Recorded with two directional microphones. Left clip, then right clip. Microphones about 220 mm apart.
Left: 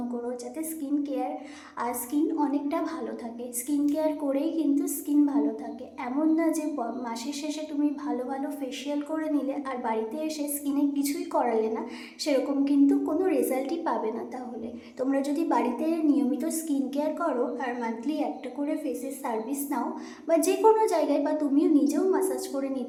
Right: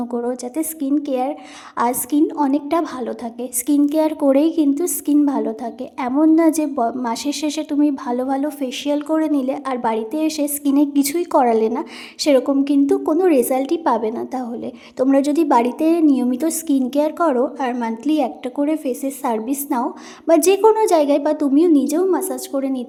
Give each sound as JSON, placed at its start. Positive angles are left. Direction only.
{"t": 0.1, "sound": "a woman's voice", "side_deg": -45}